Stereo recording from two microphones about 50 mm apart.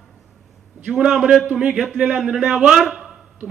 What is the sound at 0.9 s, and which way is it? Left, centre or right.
A man's voice, centre.